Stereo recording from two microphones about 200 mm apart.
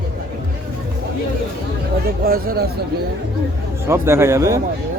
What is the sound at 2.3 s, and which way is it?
Speech, 45° right (ahead or behind).